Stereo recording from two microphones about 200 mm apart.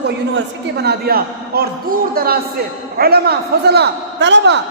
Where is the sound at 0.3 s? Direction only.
55° right (ahead or behind).